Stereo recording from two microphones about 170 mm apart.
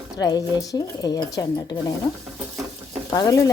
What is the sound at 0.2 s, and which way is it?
Speech, 20° left (ahead or behind).